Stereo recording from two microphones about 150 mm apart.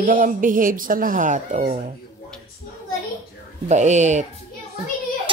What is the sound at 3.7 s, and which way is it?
Speech, 50° right (ahead or behind).